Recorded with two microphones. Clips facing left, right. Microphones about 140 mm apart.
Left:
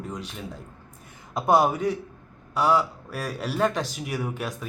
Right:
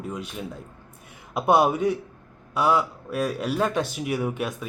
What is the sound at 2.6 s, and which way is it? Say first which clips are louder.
Speech: even; centre (ahead or behind).